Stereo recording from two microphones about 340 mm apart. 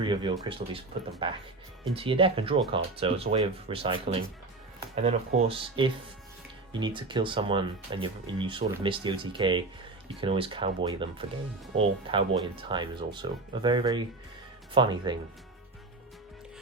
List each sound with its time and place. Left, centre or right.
0.0 s speech: centre